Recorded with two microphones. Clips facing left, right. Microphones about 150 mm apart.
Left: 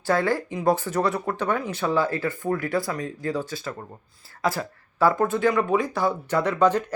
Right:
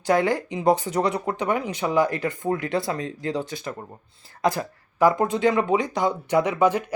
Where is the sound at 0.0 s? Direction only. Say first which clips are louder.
Right 2 dB; 15° right (ahead or behind).